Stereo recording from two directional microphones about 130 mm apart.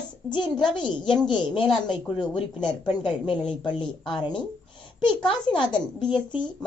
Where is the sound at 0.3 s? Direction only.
35° left (ahead or behind).